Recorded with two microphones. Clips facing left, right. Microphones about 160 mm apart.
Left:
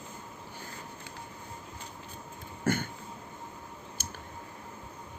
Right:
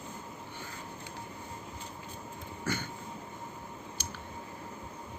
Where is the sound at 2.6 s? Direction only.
50° left (ahead or behind).